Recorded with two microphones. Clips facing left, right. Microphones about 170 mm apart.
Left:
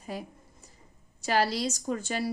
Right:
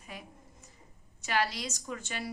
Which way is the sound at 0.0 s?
35° left (ahead or behind).